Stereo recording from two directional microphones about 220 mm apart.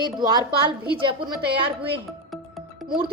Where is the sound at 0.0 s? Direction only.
20° right (ahead or behind).